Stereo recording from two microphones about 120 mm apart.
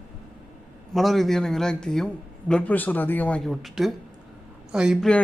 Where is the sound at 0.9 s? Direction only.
Centre (ahead or behind).